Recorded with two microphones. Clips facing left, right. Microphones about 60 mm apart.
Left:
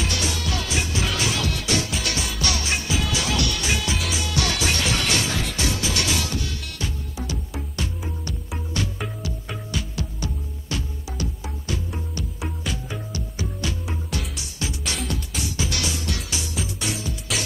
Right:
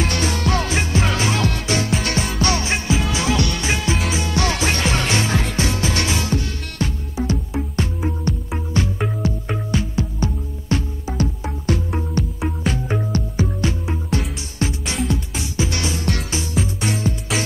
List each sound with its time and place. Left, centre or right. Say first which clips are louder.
0.0 s music: right 6 dB; right
16.5 s music: right 7 dB; right